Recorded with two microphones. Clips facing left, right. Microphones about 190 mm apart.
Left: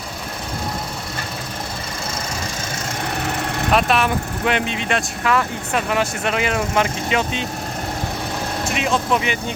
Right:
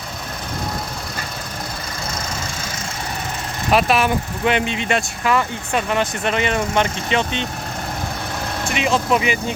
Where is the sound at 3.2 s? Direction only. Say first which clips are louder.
Left 5 dB; 70° left (ahead or behind).